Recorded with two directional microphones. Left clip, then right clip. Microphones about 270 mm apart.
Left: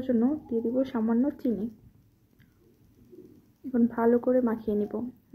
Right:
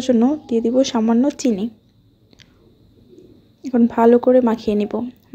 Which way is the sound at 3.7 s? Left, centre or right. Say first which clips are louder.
Right 11 dB; right.